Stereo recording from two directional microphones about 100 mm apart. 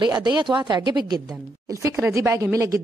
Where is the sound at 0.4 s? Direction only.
50° right (ahead or behind).